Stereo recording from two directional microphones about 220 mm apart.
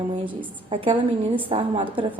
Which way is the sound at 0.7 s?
25° right (ahead or behind).